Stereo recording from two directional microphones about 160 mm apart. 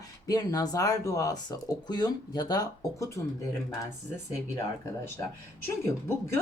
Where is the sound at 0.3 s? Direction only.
25° left (ahead or behind).